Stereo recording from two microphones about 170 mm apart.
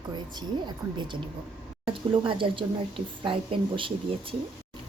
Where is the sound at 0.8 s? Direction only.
15° right (ahead or behind).